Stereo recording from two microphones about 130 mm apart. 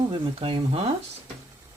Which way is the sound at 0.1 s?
40° right (ahead or behind).